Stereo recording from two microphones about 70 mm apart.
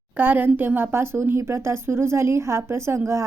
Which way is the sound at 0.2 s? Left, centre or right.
Right.